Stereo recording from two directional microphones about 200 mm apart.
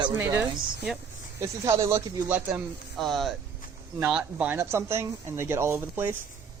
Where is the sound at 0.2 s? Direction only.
10° right (ahead or behind).